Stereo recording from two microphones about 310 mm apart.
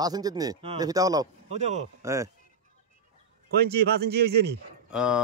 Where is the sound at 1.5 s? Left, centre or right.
Right.